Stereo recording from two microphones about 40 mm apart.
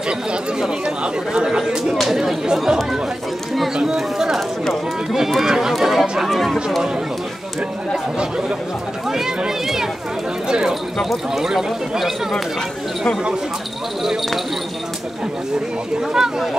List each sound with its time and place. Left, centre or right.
1.0 s speech: right
3.7 s a sound: centre
5.4 s speech: centre
8.2 s speech: centre
11.1 s speech: centre
16.1 s speech: centre